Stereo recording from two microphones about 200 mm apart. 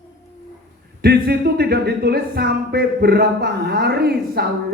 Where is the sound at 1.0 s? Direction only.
55° right (ahead or behind).